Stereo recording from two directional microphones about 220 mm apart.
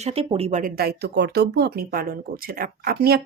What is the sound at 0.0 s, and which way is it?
Speech, 25° right (ahead or behind).